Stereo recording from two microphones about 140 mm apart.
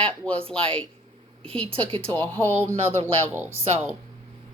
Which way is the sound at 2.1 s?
15° left (ahead or behind).